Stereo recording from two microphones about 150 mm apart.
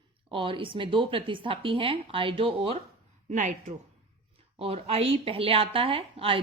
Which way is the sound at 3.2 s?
55° right (ahead or behind).